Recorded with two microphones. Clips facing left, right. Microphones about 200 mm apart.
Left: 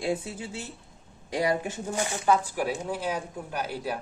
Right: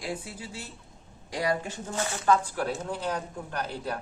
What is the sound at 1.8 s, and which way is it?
Speech, 15° left (ahead or behind).